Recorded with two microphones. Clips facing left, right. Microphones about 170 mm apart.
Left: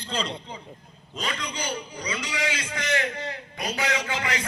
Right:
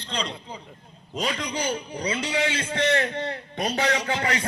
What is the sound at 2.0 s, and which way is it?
A man's voice, 30° right (ahead or behind).